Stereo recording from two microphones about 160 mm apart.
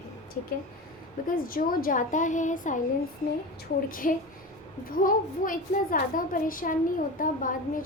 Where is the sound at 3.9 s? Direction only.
60° left (ahead or behind).